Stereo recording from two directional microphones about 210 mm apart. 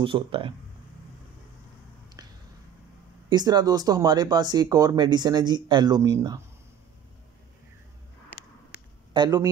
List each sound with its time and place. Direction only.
0.0 s speech: 25° right (ahead or behind)
3.3 s speech: 20° right (ahead or behind)
9.1 s speech: 20° right (ahead or behind)